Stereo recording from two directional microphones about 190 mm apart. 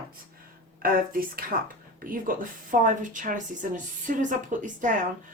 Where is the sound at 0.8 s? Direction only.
50° right (ahead or behind).